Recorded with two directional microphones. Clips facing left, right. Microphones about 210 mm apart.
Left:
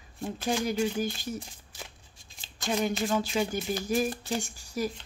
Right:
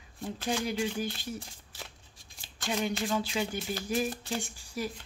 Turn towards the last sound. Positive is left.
turn(degrees=40)  # may be behind; listen again after turning